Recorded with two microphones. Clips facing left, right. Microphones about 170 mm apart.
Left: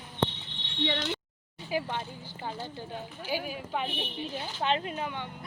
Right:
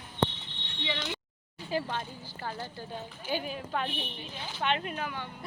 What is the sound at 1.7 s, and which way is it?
Speech, 10° left (ahead or behind).